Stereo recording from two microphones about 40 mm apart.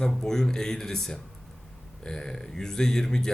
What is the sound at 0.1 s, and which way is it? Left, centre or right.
Speech, centre.